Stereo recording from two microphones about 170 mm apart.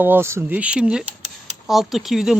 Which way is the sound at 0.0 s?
15° right (ahead or behind).